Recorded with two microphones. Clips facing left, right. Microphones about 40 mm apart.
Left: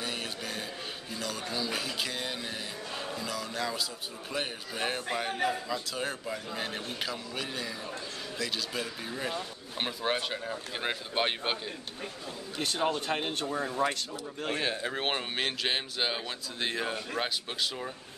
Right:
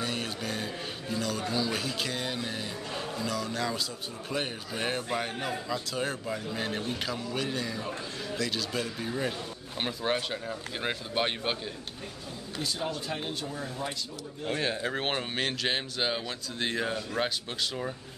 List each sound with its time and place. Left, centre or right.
0.0 s music: centre
1.1 s speech: centre
12.5 s speech: left
14.6 s speech: centre